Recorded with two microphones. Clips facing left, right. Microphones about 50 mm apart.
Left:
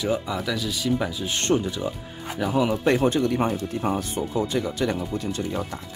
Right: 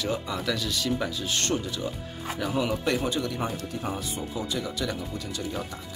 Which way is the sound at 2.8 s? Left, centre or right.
Left.